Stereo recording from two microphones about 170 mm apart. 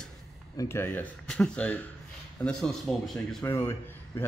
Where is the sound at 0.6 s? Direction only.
15° left (ahead or behind).